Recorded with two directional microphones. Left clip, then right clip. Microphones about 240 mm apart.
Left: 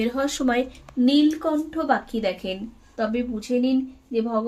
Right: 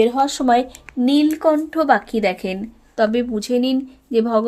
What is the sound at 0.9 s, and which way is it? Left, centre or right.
Speech, right.